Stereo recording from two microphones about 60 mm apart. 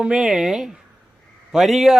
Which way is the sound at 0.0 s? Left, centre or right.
Centre.